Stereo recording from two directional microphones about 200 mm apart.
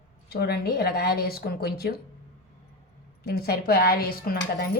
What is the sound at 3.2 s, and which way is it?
Speech, 50° left (ahead or behind).